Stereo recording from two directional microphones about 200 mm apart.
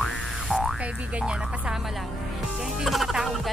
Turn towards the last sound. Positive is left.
turn(degrees=0)  # may be behind; listen again after turning